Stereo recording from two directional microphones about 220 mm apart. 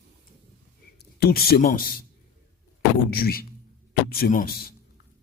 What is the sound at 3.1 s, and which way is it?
A man's voice, 45° left (ahead or behind).